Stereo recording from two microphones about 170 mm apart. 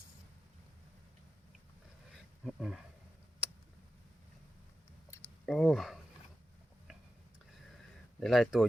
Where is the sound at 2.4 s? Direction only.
Centre (ahead or behind).